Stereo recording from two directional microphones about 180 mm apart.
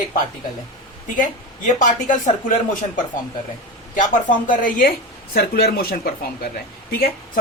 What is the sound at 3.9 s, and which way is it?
Speech, 45° left (ahead or behind).